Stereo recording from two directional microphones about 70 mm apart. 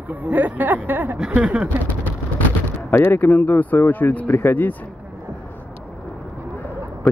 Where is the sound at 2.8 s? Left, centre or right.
Left.